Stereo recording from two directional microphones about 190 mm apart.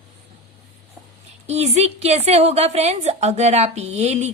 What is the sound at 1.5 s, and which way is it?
A woman's voice, 35° right (ahead or behind).